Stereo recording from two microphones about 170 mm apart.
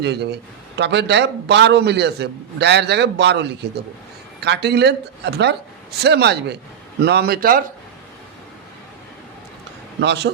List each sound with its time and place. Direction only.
0.0 s a man's voice: 80° right
4.4 s speech: 75° right (ahead or behind); by 7.6 s 55° right (ahead or behind)
10.0 s a man's voice: 90° right